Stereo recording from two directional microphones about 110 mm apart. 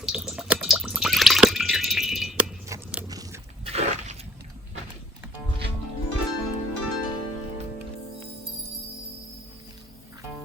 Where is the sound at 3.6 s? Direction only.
70° right (ahead or behind).